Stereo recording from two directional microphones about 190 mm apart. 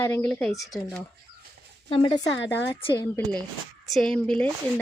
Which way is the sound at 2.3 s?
70° left (ahead or behind).